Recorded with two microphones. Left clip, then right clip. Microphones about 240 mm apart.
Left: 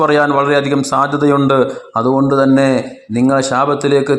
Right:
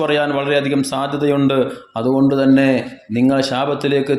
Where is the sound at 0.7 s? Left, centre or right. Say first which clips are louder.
Left 6 dB; centre.